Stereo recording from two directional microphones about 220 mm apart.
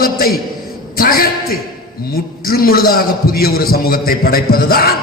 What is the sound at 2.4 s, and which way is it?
A man's voice, 40° left (ahead or behind).